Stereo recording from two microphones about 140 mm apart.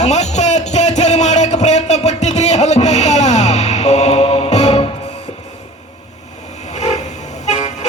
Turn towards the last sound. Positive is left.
turn(degrees=55)  # may be behind; listen again after turning